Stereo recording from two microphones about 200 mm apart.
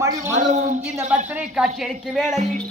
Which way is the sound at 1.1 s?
5° right (ahead or behind).